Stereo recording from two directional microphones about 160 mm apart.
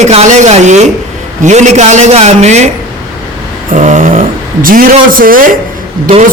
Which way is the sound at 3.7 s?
50° right (ahead or behind).